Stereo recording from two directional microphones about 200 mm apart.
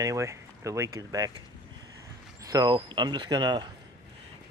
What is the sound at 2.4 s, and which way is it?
Speech, 20° right (ahead or behind).